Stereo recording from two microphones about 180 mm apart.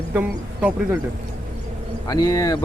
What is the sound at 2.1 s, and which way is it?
Speech, 20° left (ahead or behind).